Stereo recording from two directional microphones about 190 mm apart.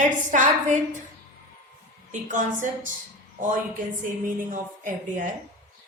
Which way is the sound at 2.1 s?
40° right (ahead or behind).